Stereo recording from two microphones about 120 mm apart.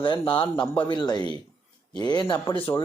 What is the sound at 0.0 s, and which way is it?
Speech, 45° left (ahead or behind).